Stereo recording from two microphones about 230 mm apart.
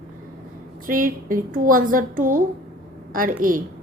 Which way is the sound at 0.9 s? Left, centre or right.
Right.